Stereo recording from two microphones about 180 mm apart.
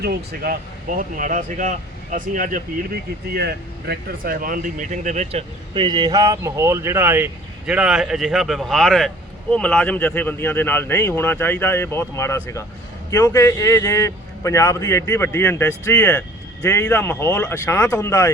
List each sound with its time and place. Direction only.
0.0 s speech: 60° right (ahead or behind); by 18.3 s 15° left (ahead or behind)